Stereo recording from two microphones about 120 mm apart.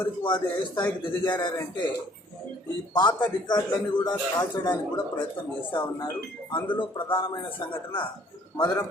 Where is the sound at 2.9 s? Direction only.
40° left (ahead or behind).